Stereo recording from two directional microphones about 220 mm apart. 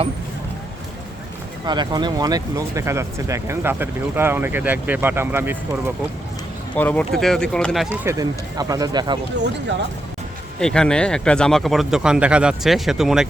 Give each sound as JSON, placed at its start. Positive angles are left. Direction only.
{"t": 1.6, "sound": "speech", "side_deg": -20}
{"t": 6.7, "sound": "speech", "side_deg": 5}
{"t": 8.0, "sound": "speech", "side_deg": -15}
{"t": 10.6, "sound": "speech", "side_deg": 5}